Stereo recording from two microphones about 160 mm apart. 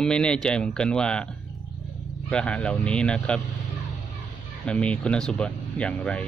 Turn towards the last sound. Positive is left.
turn(degrees=5)  # may be behind; listen again after turning